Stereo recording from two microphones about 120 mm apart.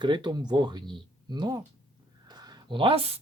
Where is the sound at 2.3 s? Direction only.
35° right (ahead or behind); by 3.1 s 55° right (ahead or behind).